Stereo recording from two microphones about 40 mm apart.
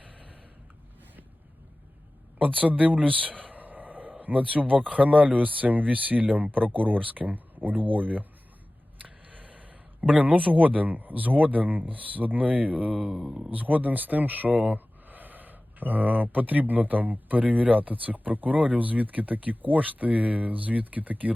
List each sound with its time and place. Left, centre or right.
2.4 s speech: right
3.4 s a sound: right
4.2 s speech: right
9.0 s a sound: right
10.2 s speech: right
13.1 s speech: centre
13.6 s speech: right